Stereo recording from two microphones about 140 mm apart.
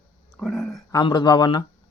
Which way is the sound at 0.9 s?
30° left (ahead or behind).